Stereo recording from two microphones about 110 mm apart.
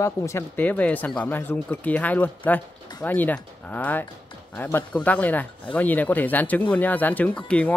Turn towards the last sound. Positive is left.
turn(degrees=10)  # may be behind; listen again after turning